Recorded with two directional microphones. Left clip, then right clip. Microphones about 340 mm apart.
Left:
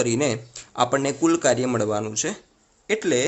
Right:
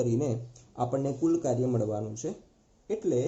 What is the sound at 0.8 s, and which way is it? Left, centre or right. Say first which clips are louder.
A man's voice: left 9 dB; left.